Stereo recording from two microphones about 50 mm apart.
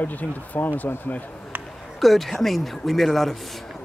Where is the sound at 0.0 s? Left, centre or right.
Left.